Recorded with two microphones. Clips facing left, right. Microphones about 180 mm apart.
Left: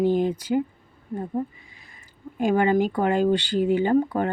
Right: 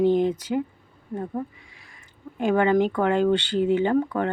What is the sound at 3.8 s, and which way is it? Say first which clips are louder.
Speech: left 1 dB; 40° left (ahead or behind).